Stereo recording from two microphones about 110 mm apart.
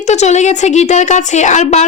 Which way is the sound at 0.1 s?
90° left.